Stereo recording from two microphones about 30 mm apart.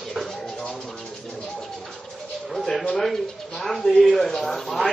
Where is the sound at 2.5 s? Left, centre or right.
Left.